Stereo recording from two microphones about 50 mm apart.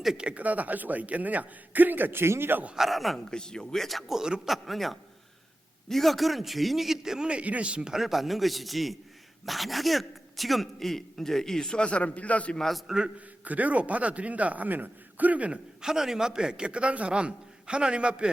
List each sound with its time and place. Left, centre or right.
0.2 s a man's voice: right
2.7 s a man's voice: centre
3.2 s speech: centre
3.8 s a man's voice: centre; by 7.9 s right
7.9 s a man's voice: centre; by 12.5 s left
12.5 s speech: centre
13.1 s a man's voice: right
15.8 s a man's voice: centre